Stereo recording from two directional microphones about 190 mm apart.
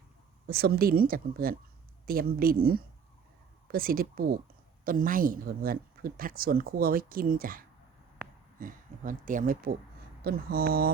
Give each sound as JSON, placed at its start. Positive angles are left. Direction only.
{"t": 0.4, "sound": "speech", "side_deg": -55}